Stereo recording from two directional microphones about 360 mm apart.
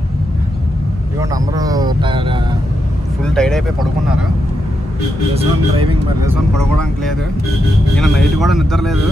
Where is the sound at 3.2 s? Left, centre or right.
Centre.